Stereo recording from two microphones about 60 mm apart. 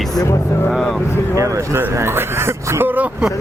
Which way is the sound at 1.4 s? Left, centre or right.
Right.